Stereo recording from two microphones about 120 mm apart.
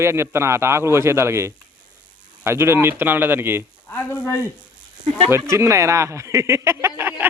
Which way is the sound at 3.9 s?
20° left (ahead or behind).